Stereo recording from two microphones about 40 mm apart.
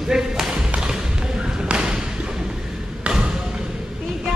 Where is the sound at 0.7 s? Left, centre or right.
Centre.